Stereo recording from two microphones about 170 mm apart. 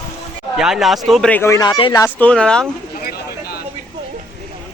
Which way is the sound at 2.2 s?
5° left (ahead or behind).